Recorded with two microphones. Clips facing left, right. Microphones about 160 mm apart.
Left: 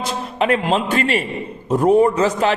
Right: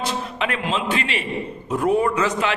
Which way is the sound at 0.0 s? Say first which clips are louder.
Left 4 dB; 40° left (ahead or behind).